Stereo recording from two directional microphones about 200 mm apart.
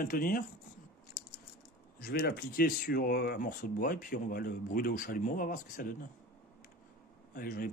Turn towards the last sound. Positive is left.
turn(degrees=45)  # may be behind; listen again after turning